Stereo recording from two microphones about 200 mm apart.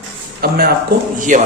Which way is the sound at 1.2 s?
40° right (ahead or behind).